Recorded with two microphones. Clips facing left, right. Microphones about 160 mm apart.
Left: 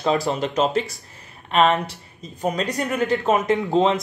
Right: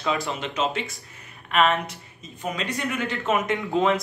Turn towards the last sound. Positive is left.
turn(degrees=30)  # may be behind; listen again after turning